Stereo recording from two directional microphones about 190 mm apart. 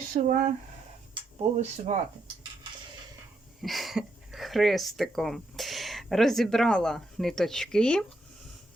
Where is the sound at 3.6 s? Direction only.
Centre (ahead or behind).